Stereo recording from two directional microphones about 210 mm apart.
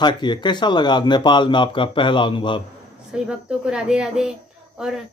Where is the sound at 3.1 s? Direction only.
5° right (ahead or behind).